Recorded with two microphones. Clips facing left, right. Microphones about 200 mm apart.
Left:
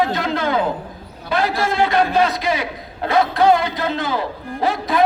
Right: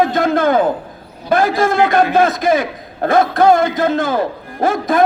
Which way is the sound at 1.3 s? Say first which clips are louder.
Right 6 dB; 50° right (ahead or behind).